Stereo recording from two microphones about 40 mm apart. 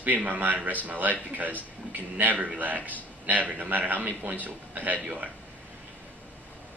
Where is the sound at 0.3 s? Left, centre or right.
Right.